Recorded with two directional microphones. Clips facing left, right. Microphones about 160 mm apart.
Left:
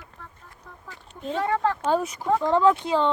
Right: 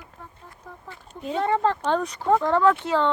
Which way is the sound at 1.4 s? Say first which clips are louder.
Right 2 dB; 20° right (ahead or behind).